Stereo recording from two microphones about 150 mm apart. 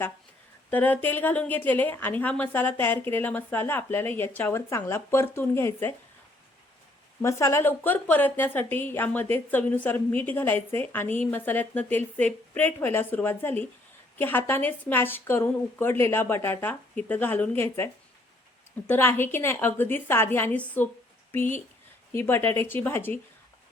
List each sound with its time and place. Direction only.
0.7 s a woman's voice: 10° left (ahead or behind)
7.2 s a woman's voice: 20° left (ahead or behind)